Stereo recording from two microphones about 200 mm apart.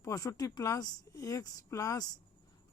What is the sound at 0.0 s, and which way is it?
Speech, 15° left (ahead or behind).